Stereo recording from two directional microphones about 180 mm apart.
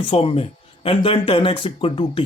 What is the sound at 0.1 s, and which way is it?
Speech, 30° left (ahead or behind).